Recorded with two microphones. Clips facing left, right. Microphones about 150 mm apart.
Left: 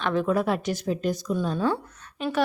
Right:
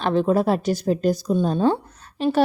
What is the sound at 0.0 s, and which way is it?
A woman's voice, 30° right (ahead or behind).